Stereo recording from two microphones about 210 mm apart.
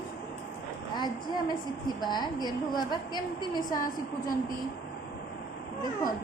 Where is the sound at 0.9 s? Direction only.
20° left (ahead or behind).